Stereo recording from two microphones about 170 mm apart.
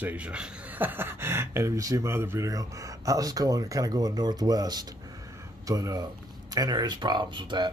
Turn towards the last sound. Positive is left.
turn(degrees=-25)  # may be behind; listen again after turning